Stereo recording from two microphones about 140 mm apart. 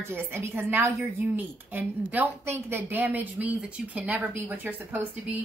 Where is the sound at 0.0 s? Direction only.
15° right (ahead or behind).